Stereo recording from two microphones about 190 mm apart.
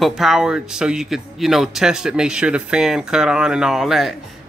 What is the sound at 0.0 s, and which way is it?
Speech, centre (ahead or behind).